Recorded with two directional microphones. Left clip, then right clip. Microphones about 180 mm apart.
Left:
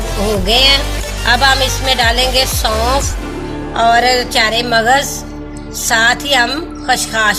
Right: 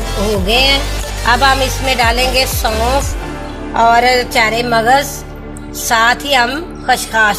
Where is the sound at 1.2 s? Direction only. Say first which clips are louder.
Even; 20° right (ahead or behind).